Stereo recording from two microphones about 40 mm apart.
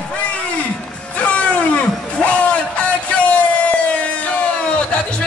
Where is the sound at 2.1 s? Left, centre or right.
Left.